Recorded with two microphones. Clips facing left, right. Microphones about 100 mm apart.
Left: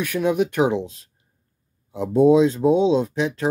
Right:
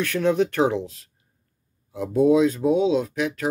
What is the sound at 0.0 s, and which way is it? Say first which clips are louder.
Speech: even; 15° left (ahead or behind).